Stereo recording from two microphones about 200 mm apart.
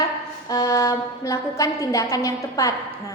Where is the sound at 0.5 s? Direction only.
15° left (ahead or behind).